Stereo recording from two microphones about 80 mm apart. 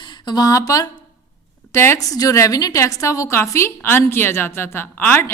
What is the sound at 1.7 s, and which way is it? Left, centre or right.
Speech, left.